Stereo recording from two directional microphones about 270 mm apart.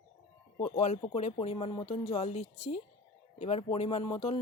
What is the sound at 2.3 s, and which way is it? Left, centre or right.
Speech, left.